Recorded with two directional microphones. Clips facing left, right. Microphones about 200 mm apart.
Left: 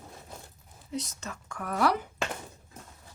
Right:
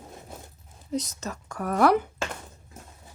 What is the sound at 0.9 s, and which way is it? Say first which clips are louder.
A woman's voice: right 6 dB; 40° right (ahead or behind).